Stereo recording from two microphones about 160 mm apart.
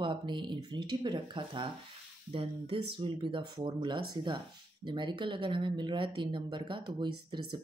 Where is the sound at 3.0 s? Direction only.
30° right (ahead or behind).